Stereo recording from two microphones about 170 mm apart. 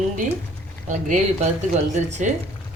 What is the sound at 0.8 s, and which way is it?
Speech, 45° right (ahead or behind).